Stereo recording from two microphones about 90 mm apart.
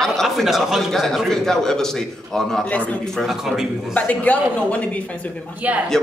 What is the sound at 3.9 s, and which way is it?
Speech, 15° left (ahead or behind).